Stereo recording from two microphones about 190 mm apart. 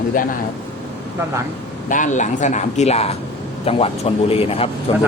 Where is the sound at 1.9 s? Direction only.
40° left (ahead or behind).